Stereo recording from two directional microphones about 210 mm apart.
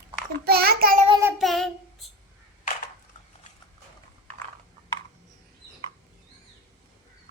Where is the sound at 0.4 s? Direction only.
50° right (ahead or behind).